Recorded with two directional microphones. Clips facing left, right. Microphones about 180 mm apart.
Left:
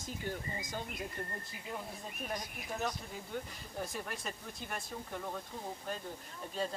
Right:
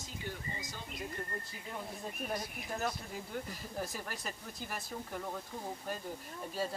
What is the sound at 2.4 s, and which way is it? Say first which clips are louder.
Speech: right 1 dB; 5° right (ahead or behind).